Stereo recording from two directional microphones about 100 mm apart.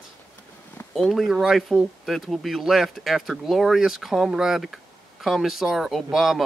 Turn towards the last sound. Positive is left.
turn(degrees=0)  # may be behind; listen again after turning